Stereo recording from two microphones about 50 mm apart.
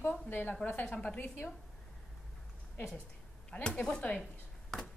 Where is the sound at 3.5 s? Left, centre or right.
Centre.